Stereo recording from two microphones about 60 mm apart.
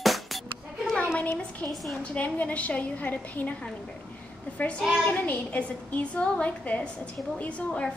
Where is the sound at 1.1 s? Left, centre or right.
Left.